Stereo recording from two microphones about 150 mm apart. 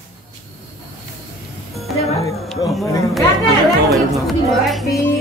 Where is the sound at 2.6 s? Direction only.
25° left (ahead or behind).